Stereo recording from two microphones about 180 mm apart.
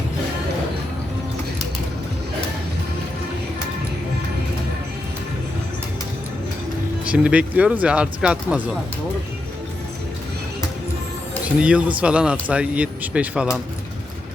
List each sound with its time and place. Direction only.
7.0 s speech: 5° right (ahead or behind)
11.6 s speech: 5° right (ahead or behind)